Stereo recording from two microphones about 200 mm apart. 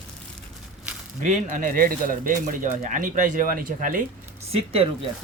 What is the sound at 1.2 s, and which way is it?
Speech, 40° right (ahead or behind).